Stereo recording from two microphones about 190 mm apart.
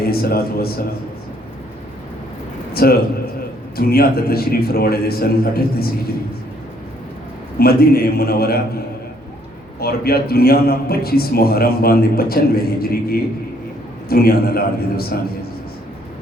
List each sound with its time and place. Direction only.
0.0 s a man's voice: 55° left (ahead or behind)
2.8 s a man's voice: 55° left (ahead or behind)
7.6 s a man's voice: 55° left (ahead or behind)
9.8 s a man's voice: 55° left (ahead or behind)